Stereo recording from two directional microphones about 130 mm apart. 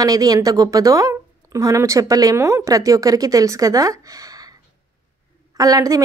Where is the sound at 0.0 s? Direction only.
30° right (ahead or behind).